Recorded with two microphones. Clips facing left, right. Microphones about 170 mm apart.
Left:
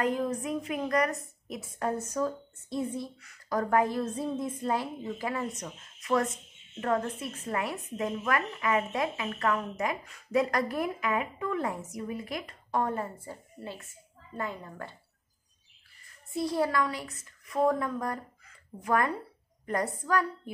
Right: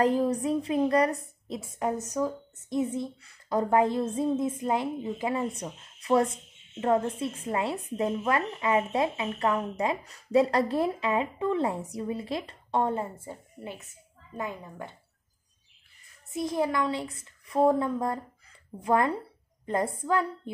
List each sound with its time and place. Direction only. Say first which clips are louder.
0.0 s a woman's voice: right 5 dB; 35° right (ahead or behind)
1.8 s a woman's voice: right 1 dB; 15° right (ahead or behind)
16.3 s a woman's voice: right 1 dB; 20° right (ahead or behind)